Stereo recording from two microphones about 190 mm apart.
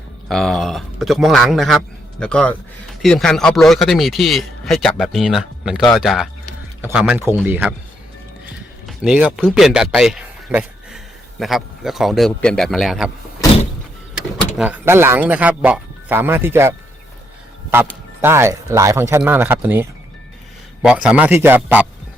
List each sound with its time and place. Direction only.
0.3 s speech: centre (ahead or behind)
8.9 s speech: 5° right (ahead or behind)
14.2 s speech: 5° right (ahead or behind)
18.2 s speech: 15° right (ahead or behind)